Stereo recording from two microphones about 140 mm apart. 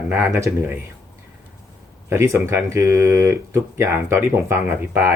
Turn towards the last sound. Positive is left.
turn(degrees=-15)  # may be behind; listen again after turning